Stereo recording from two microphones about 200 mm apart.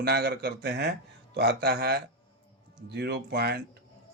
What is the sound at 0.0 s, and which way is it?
A man's voice, 50° right (ahead or behind).